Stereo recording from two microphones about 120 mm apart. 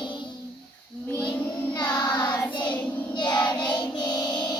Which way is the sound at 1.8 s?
35° left (ahead or behind).